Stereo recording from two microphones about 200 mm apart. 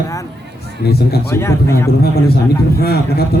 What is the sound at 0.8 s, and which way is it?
Speech, 50° left (ahead or behind).